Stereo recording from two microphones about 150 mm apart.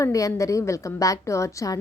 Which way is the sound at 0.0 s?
20° left (ahead or behind).